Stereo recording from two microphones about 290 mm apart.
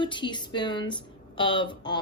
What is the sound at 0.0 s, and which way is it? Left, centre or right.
Speech, centre.